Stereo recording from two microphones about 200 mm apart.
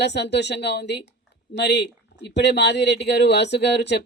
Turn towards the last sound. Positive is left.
turn(degrees=55)  # may be behind; listen again after turning